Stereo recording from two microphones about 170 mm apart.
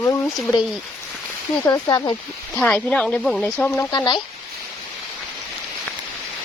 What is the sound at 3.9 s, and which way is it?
Speech, 25° left (ahead or behind).